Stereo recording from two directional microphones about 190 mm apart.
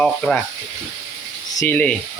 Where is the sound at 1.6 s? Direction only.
10° left (ahead or behind).